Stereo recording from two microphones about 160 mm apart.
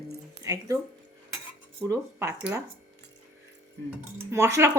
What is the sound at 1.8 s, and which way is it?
Speech, 15° right (ahead or behind).